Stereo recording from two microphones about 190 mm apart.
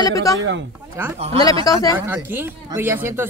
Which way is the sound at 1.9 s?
10° right (ahead or behind).